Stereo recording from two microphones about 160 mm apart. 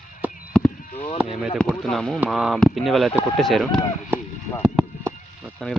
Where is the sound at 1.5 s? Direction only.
5° left (ahead or behind).